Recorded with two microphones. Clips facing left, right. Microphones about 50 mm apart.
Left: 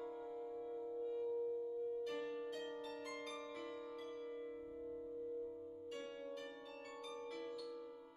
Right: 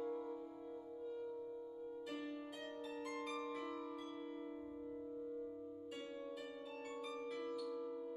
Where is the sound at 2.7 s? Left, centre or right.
Centre.